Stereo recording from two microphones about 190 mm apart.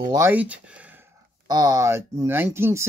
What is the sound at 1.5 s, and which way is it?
Speech, 20° right (ahead or behind).